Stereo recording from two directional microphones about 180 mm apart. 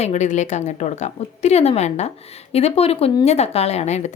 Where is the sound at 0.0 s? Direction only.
40° left (ahead or behind).